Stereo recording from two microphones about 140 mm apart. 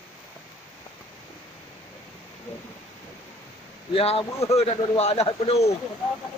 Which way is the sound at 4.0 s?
40° left (ahead or behind).